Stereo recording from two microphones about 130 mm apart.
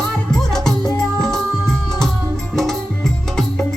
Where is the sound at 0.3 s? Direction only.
5° left (ahead or behind).